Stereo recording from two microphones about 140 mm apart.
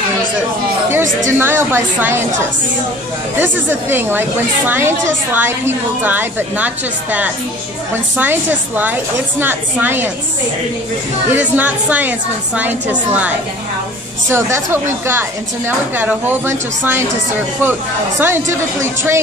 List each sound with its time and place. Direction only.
1.2 s a woman's voice: 15° right (ahead or behind)
3.9 s a woman's voice: 15° right (ahead or behind)
11.3 s a woman's voice: 10° right (ahead or behind)
14.3 s a woman's voice: 20° right (ahead or behind)
18.2 s a woman's voice: 20° right (ahead or behind)